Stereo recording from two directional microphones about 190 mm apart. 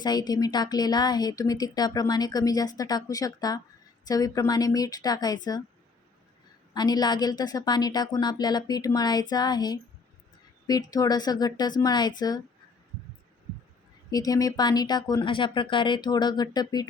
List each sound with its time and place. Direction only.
0.0 s speech: 20° left (ahead or behind)
6.7 s speech: 20° left (ahead or behind)
14.1 s speech: 20° left (ahead or behind)